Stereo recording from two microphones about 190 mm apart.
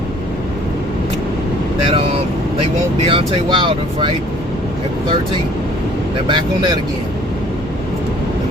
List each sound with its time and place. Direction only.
1.9 s vehicle: 30° right (ahead or behind)
3.1 s speech: 25° right (ahead or behind)
6.2 s speech: 25° right (ahead or behind)